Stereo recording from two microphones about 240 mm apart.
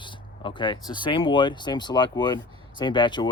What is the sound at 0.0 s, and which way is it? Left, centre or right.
Speech, centre.